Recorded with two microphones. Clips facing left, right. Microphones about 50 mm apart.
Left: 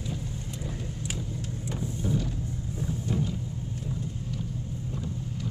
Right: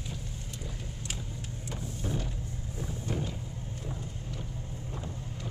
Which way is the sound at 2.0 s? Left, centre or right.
Right.